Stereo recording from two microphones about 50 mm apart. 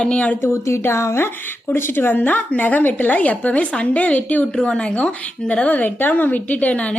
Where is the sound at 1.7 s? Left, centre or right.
Left.